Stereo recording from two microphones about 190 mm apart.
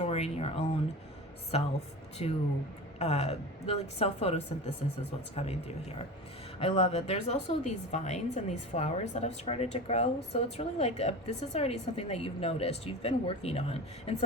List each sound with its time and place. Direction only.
0.0 s a woman's voice: 35° left (ahead or behind)